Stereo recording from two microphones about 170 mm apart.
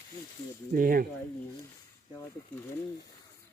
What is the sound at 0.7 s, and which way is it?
Speech, 55° right (ahead or behind).